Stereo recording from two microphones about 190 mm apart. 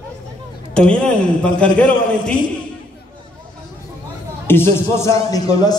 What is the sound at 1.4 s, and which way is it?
Speech, 5° left (ahead or behind).